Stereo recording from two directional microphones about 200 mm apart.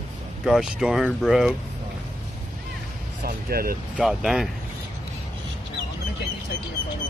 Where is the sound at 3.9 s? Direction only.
Centre (ahead or behind).